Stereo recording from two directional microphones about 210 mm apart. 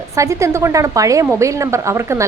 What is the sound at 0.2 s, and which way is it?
Speech, 15° right (ahead or behind).